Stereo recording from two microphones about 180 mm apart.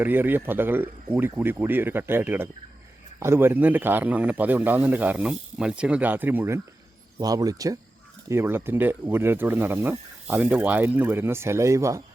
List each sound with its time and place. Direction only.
0.0 s speech: 10° right (ahead or behind)